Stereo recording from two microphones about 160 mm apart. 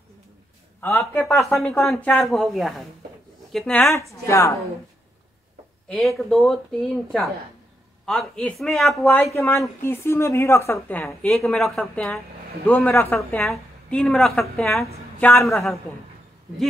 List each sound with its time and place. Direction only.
0.7 s a man's voice: 15° left (ahead or behind)
1.2 s a woman's voice: centre (ahead or behind)
1.5 s a woman's voice: 15° left (ahead or behind)
3.9 s speech: 20° left (ahead or behind)
5.9 s a woman's voice: centre (ahead or behind)
9.2 s a woman's voice: 15° left (ahead or behind); by 14.9 s centre (ahead or behind)
15.1 s a woman's voice: 15° left (ahead or behind)